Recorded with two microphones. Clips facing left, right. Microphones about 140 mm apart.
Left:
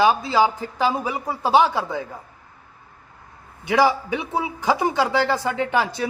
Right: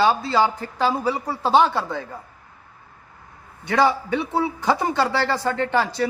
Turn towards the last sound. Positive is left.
turn(degrees=15)  # may be behind; listen again after turning